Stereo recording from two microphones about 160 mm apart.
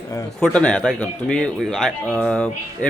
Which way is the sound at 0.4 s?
5° left (ahead or behind).